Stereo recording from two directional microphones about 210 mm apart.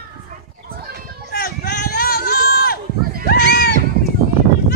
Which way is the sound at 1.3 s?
50° left (ahead or behind).